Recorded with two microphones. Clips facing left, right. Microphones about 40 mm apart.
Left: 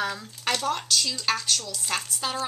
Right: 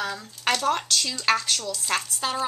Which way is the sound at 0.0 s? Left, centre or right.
Centre.